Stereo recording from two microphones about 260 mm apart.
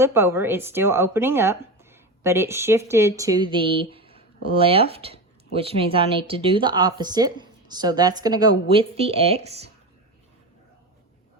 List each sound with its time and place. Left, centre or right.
0.0 s speech: centre